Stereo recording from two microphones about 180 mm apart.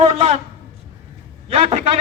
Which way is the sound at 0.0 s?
35° right (ahead or behind).